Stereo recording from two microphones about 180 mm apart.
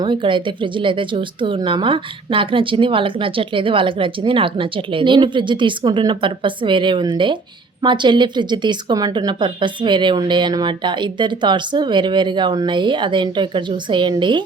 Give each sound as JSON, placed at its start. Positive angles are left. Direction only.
{"t": 0.0, "sound": "speech", "side_deg": -25}